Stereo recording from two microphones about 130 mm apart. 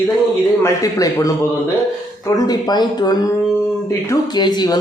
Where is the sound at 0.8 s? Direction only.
25° left (ahead or behind).